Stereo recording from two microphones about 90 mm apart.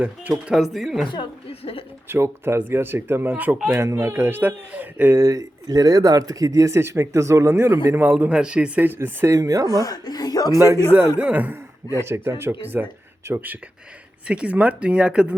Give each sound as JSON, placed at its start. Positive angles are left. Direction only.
{"t": 0.0, "sound": "speech", "side_deg": -15}
{"t": 0.6, "sound": "a woman's voice", "side_deg": 0}
{"t": 1.0, "sound": "a woman's voice", "side_deg": 65}
{"t": 2.0, "sound": "speech", "side_deg": -25}
{"t": 3.7, "sound": "speech", "side_deg": -30}
{"t": 5.1, "sound": "speech", "side_deg": -40}
{"t": 8.2, "sound": "speech", "side_deg": -10}
{"t": 9.8, "sound": "speech", "side_deg": 45}
{"t": 10.6, "sound": "speech", "side_deg": -30}
{"t": 10.9, "sound": "speech", "side_deg": -20}
{"t": 12.0, "sound": "speech", "side_deg": -30}
{"t": 14.3, "sound": "speech", "side_deg": -15}